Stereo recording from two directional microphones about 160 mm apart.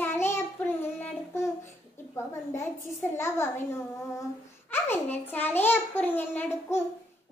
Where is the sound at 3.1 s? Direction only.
15° left (ahead or behind).